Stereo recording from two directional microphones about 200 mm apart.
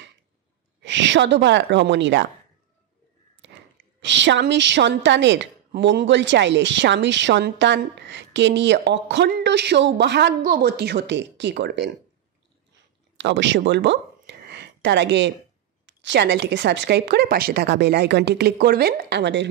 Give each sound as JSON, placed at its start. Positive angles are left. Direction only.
{"t": 0.8, "sound": "a woman's voice", "side_deg": -65}
{"t": 3.4, "sound": "sigh", "side_deg": -65}
{"t": 4.0, "sound": "a woman's voice", "side_deg": -65}
{"t": 13.2, "sound": "a woman's voice", "side_deg": -65}